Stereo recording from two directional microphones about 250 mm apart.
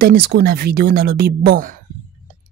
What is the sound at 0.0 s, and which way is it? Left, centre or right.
Speech, right.